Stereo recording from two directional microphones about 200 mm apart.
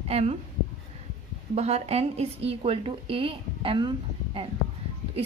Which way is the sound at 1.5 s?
30° right (ahead or behind).